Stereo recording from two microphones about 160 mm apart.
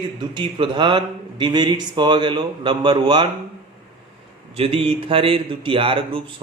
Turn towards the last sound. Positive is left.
turn(degrees=-35)  # may be behind; listen again after turning